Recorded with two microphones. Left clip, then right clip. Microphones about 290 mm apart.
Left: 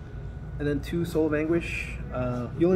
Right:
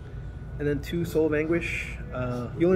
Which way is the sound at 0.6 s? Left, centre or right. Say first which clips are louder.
Even; centre.